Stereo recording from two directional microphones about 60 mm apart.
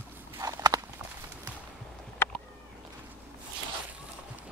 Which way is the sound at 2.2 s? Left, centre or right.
Left.